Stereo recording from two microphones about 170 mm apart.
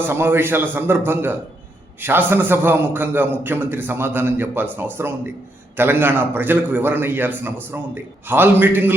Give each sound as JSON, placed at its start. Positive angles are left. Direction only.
{"t": 0.0, "sound": "a man's voice", "side_deg": -15}